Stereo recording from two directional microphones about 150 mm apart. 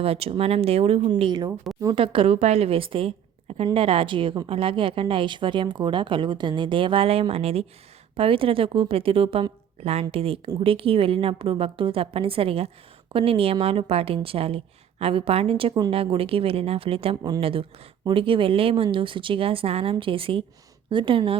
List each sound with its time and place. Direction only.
0.0 s speech: 40° right (ahead or behind)